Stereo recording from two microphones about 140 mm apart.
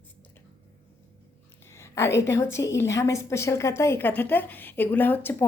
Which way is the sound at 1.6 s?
20° left (ahead or behind).